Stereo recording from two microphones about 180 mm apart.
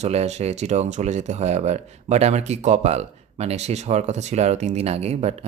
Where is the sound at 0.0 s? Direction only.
35° right (ahead or behind).